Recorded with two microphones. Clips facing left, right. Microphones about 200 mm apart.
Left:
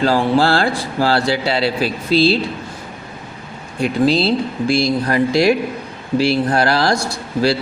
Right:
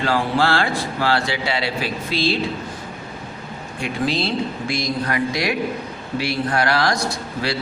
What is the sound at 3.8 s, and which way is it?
Speech, 35° left (ahead or behind).